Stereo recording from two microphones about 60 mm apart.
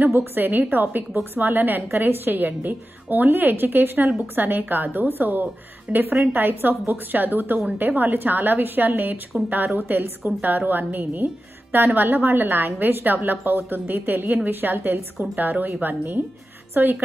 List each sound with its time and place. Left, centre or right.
0.0 s a woman's voice: right